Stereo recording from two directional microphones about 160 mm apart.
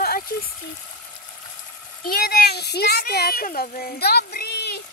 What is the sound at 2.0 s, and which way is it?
Speech, 70° left (ahead or behind).